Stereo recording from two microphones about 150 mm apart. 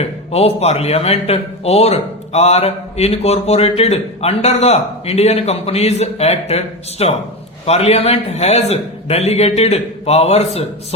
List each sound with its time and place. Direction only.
0.0 s speech: 45° left (ahead or behind)